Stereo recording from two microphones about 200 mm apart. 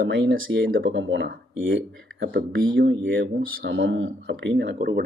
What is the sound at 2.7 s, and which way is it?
Speech, 60° right (ahead or behind).